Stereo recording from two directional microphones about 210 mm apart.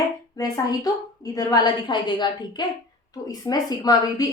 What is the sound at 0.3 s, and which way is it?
A woman's voice, 20° left (ahead or behind).